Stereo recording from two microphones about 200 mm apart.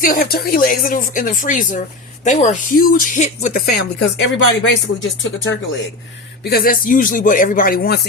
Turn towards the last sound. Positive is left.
turn(degrees=45)  # may be behind; listen again after turning